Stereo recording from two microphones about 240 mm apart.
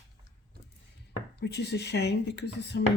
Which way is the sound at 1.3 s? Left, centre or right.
Left.